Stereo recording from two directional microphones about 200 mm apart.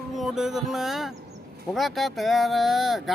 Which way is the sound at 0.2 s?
Centre (ahead or behind).